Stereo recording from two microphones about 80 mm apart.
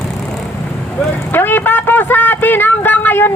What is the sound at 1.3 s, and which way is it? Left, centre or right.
Speech, left.